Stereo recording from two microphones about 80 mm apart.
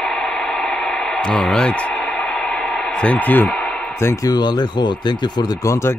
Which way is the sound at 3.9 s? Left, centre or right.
Left.